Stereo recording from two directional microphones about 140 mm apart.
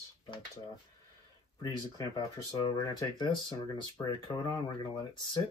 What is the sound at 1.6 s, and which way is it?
Speech, 30° left (ahead or behind).